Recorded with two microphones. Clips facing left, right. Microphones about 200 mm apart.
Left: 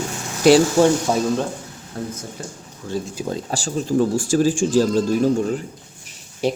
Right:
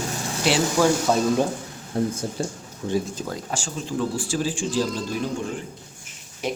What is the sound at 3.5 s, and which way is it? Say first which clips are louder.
Speech: left 9 dB; 40° left (ahead or behind).